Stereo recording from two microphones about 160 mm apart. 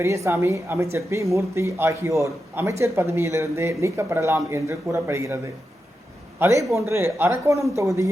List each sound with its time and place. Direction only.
0.0 s a man's voice: 20° right (ahead or behind)
6.4 s a man's voice: 20° right (ahead or behind)